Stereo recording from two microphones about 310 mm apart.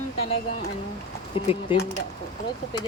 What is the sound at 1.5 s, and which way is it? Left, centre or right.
Speech, centre.